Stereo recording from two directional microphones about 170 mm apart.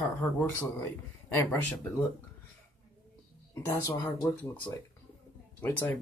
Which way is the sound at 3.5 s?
20° left (ahead or behind).